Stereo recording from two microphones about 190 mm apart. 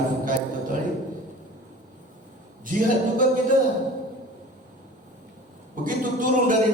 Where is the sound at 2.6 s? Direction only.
45° right (ahead or behind).